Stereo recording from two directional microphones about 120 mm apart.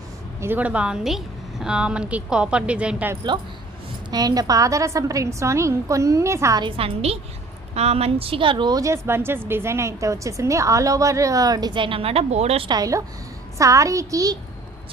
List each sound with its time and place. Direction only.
0.4 s a woman's voice: 15° right (ahead or behind)
3.3 s a woman's voice: 40° right (ahead or behind); by 6.6 s 25° right (ahead or behind)
6.6 s a woman's voice: 50° right (ahead or behind)
12.6 s a woman's voice: 30° right (ahead or behind)